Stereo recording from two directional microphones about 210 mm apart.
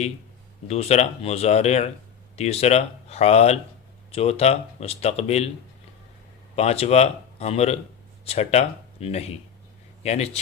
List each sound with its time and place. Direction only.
0.7 s speech: 30° left (ahead or behind)
6.6 s speech: 30° left (ahead or behind)